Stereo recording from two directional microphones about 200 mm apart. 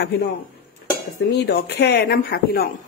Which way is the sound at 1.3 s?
55° left (ahead or behind).